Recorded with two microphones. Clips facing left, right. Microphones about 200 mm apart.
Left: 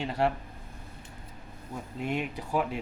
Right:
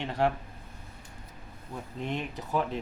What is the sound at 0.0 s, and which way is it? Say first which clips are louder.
Speech: even; 5° left (ahead or behind).